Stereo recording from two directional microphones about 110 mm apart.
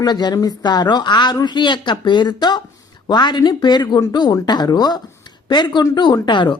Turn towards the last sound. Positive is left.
turn(degrees=45)  # may be behind; listen again after turning